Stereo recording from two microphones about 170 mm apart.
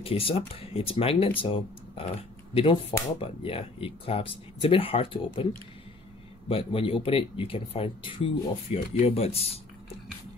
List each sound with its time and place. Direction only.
0.0 s speech: 35° left (ahead or behind)
6.5 s speech: 35° left (ahead or behind)